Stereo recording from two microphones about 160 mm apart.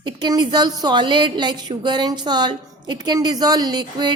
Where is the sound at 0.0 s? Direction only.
25° right (ahead or behind).